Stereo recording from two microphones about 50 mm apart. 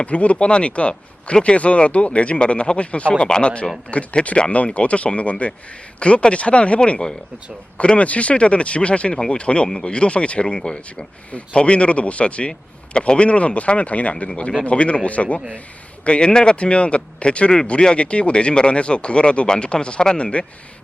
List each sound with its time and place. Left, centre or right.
0.0 s speech: left